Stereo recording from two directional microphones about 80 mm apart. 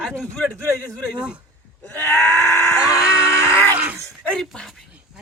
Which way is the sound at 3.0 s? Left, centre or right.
Centre.